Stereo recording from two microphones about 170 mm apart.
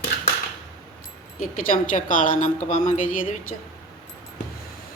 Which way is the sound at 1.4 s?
55° left (ahead or behind).